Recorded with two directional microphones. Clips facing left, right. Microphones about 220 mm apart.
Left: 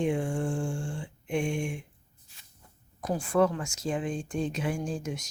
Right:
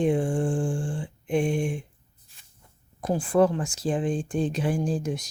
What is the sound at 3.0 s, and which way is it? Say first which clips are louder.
Speech: right 4 dB; 30° right (ahead or behind).